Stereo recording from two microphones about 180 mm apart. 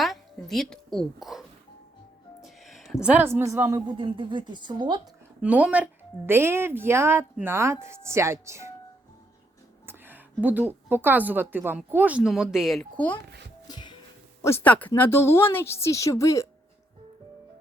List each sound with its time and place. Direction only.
0.0 s a sound: centre (ahead or behind)
2.4 s speech: centre (ahead or behind); by 4.9 s 25° right (ahead or behind)
5.4 s speech: 5° right (ahead or behind)
9.8 s a woman's voice: 10° right (ahead or behind)
13.7 s music: 25° left (ahead or behind)
14.4 s a woman's voice: 10° left (ahead or behind)